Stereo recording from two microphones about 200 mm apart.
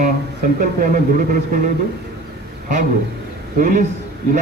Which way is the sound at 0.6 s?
45° right (ahead or behind).